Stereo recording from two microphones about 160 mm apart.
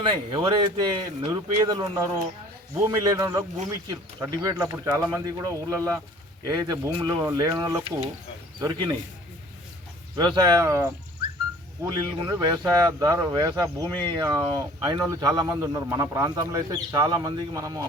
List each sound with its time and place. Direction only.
0.0 s speech: 30° right (ahead or behind)
10.2 s speech: 25° right (ahead or behind)
11.9 s speech: 25° right (ahead or behind)